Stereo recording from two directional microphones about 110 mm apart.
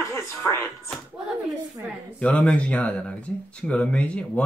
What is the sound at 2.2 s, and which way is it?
Speech, 10° left (ahead or behind).